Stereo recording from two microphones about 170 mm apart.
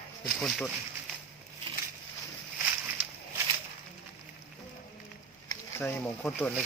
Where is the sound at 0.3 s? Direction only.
5° left (ahead or behind).